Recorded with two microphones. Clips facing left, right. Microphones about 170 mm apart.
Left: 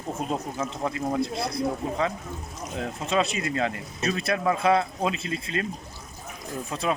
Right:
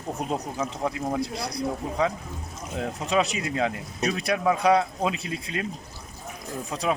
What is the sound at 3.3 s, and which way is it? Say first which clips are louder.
Speech: left 1 dB; 55° left (ahead or behind).